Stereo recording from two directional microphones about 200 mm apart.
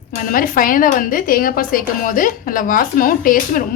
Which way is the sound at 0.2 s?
45° left (ahead or behind).